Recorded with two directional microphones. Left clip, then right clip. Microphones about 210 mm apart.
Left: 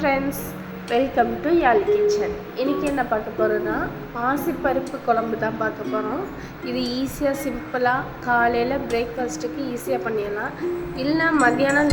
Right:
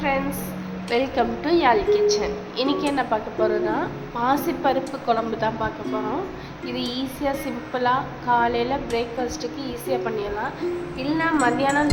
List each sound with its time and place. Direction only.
0.0 s music: 15° left (ahead or behind)
0.9 s a woman's voice: 5° left (ahead or behind)
11.0 s a woman's voice: 15° left (ahead or behind)